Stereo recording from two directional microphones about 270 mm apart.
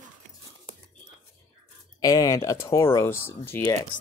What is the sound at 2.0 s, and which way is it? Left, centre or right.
Speech, centre.